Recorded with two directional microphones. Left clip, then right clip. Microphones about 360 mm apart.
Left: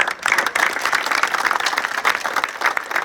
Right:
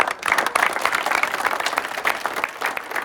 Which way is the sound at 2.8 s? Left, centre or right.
Centre.